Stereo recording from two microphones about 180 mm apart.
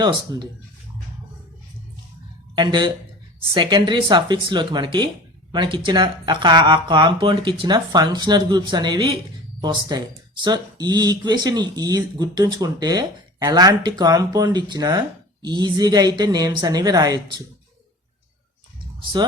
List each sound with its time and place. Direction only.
0.0 s speech: 25° right (ahead or behind)
2.6 s speech: 25° right (ahead or behind)